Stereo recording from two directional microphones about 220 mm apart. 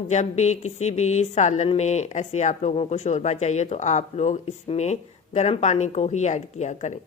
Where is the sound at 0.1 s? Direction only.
30° left (ahead or behind).